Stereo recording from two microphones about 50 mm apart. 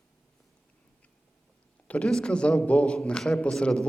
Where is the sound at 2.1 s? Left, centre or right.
Centre.